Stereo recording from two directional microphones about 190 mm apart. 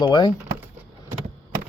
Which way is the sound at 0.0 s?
25° left (ahead or behind).